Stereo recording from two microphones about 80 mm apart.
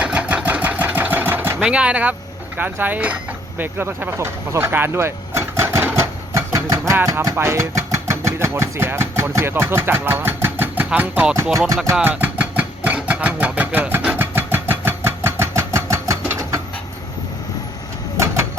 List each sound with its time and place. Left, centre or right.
0.0 s sewing machine: centre
1.5 s speech: centre
3.6 s vehicle: right
7.0 s speech: right; by 11.3 s centre
12.0 s a sound: right
13.1 s vehicle: centre; by 16.6 s right